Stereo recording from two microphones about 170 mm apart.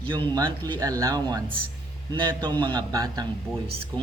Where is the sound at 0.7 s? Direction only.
20° right (ahead or behind).